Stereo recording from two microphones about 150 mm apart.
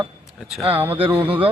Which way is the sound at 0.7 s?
40° right (ahead or behind).